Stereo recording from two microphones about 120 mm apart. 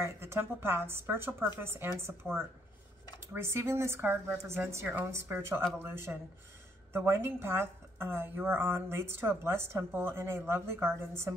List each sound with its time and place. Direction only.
0.0 s a woman's voice: 20° right (ahead or behind)
3.3 s a woman's voice: 20° right (ahead or behind)